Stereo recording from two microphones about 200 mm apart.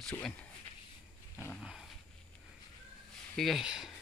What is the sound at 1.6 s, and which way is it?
Dog, centre (ahead or behind).